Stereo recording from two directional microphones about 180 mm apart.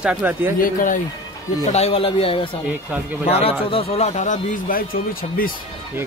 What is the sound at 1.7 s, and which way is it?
Speech, 35° left (ahead or behind).